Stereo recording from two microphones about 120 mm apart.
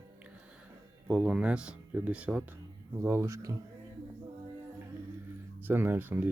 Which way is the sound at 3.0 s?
20° right (ahead or behind).